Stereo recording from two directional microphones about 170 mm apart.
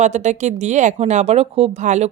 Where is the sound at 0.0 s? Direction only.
45° right (ahead or behind).